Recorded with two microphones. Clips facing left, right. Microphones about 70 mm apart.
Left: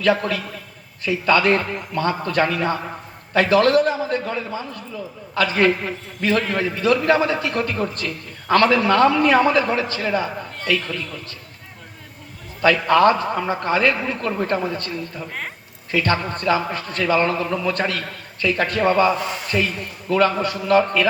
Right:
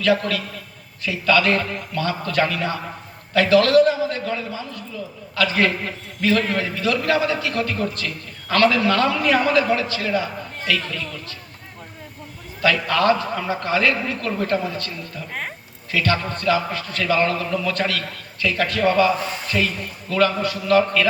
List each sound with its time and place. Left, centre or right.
0.0 s a man's voice: left
12.6 s a man's voice: left
15.3 s speech: centre
15.9 s a man's voice: left